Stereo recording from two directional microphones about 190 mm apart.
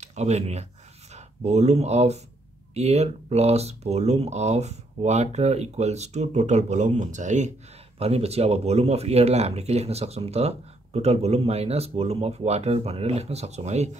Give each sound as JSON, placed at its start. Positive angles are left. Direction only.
{"t": 0.0, "sound": "speech", "side_deg": -35}